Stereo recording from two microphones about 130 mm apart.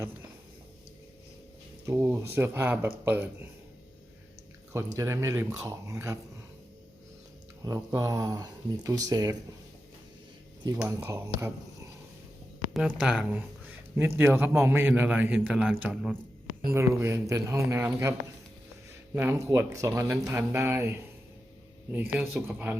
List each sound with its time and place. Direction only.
1.9 s a man's voice: 20° right (ahead or behind)
4.7 s speech: 20° right (ahead or behind)
7.6 s speech: 30° right (ahead or behind)
10.8 s speech: 20° right (ahead or behind)
12.7 s a man's voice: 5° right (ahead or behind)
16.6 s speech: 20° right (ahead or behind)
19.1 s speech: 20° right (ahead or behind)
22.5 s a man's voice: 10° right (ahead or behind)